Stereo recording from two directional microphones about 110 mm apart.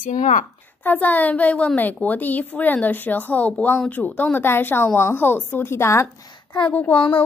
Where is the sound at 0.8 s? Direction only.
15° left (ahead or behind).